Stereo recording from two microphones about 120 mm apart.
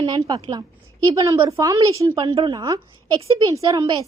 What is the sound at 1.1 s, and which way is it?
Speech, 25° right (ahead or behind).